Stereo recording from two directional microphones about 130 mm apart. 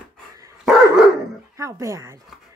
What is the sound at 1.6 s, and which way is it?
Speech, 20° right (ahead or behind).